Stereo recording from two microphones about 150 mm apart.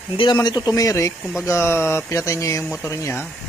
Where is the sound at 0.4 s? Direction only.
25° left (ahead or behind).